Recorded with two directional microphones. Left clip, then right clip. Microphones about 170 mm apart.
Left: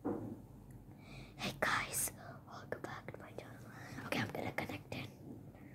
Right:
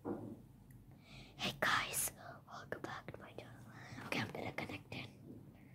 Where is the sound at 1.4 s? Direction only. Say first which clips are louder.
Even; 15° right (ahead or behind).